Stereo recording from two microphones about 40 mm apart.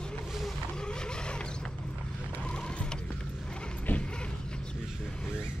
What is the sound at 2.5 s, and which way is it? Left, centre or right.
Mechanisms, left.